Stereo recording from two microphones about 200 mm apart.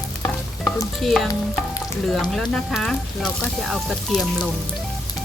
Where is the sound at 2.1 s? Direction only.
Centre (ahead or behind).